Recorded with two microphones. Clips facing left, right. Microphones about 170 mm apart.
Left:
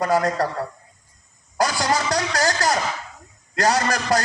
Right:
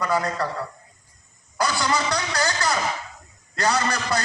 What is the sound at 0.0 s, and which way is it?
Speech, 45° left (ahead or behind).